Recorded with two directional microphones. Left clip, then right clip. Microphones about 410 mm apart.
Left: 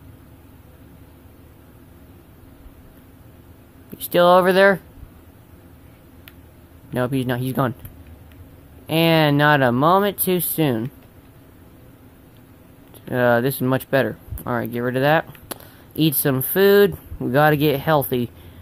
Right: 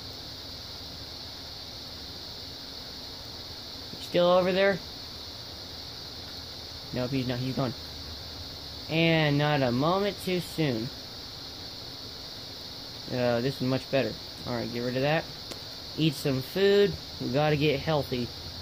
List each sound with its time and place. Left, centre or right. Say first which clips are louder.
4.1 s speech: left 9 dB; centre
6.9 s speech: left 9 dB; centre
8.8 s speech: left 8 dB; centre
13.1 s speech: left 10 dB; centre